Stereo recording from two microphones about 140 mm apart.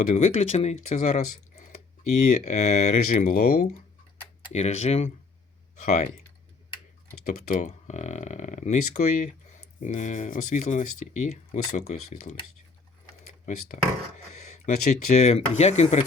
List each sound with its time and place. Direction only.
0.1 s speech: 55° left (ahead or behind); by 3.7 s 85° left
4.5 s speech: 50° left (ahead or behind)
5.8 s speech: 65° left (ahead or behind)
7.3 s speech: 60° left (ahead or behind)
13.4 s speech: 60° left (ahead or behind)